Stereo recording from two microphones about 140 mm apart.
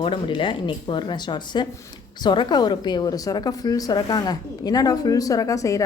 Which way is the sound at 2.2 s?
30° left (ahead or behind).